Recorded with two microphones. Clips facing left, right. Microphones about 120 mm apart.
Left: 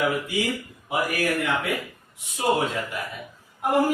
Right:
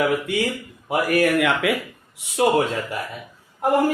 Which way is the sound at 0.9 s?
60° right (ahead or behind).